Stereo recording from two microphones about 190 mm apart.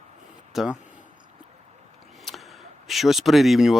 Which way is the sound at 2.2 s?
Centre (ahead or behind).